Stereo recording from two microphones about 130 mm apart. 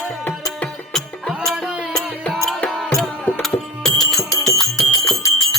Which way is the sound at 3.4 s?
Centre (ahead or behind).